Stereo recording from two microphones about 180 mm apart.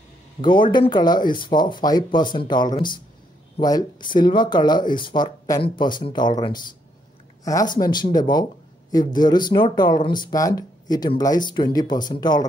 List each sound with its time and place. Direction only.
0.4 s speech: 25° left (ahead or behind)